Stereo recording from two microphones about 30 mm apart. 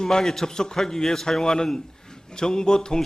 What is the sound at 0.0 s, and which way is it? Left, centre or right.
A man's voice, centre.